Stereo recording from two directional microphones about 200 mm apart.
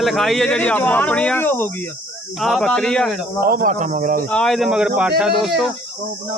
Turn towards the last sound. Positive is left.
turn(degrees=-5)  # may be behind; listen again after turning